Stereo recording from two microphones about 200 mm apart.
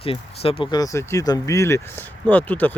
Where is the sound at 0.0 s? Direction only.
30° left (ahead or behind).